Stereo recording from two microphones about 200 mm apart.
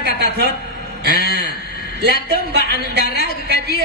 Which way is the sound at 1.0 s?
55° right (ahead or behind).